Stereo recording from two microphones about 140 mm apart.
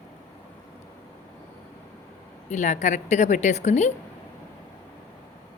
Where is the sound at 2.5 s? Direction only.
60° left (ahead or behind).